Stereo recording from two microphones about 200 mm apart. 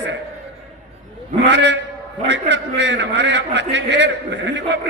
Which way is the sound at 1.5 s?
60° right (ahead or behind).